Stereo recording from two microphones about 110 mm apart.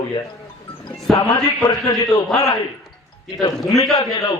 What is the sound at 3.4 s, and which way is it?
Speech, 35° left (ahead or behind).